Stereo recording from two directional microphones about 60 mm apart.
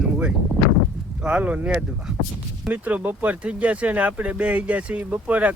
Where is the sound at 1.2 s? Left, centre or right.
Right.